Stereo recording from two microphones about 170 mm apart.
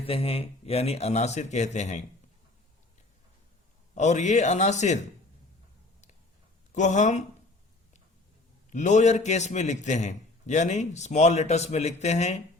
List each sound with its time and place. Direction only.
0.0 s speech: 35° left (ahead or behind)
3.9 s a man's voice: 45° left (ahead or behind)
6.7 s a man's voice: 45° left (ahead or behind)
8.7 s a man's voice: 45° left (ahead or behind)